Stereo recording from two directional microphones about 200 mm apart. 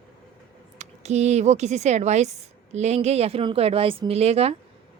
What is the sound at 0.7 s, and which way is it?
A woman's voice, 35° right (ahead or behind).